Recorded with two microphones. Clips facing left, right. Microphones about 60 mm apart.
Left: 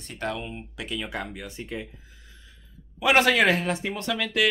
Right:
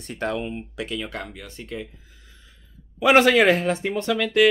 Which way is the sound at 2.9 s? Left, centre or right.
Centre.